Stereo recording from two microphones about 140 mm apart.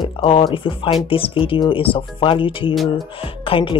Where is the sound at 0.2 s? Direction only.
40° left (ahead or behind).